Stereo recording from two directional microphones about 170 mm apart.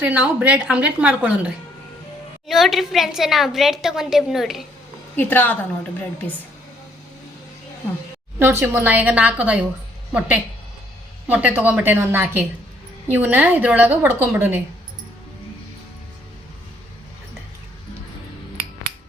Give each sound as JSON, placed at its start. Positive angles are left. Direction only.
{"t": 0.0, "sound": "speech", "side_deg": -10}
{"t": 2.5, "sound": "a woman's voice", "side_deg": 0}
{"t": 5.1, "sound": "a woman's voice", "side_deg": 10}
{"t": 8.4, "sound": "speech", "side_deg": -15}